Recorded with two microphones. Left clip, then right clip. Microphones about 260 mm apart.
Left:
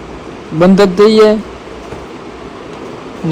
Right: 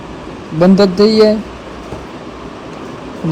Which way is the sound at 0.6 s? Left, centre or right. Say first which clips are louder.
Left 2 dB; left.